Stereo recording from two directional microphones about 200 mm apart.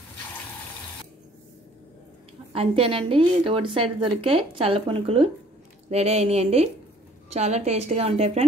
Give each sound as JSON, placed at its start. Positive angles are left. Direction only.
{"t": 2.5, "sound": "a woman's voice", "side_deg": -30}